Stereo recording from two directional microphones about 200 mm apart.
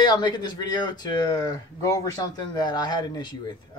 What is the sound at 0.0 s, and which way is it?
Speech, 20° left (ahead or behind).